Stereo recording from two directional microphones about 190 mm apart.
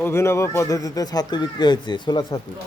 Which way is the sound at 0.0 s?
15° left (ahead or behind).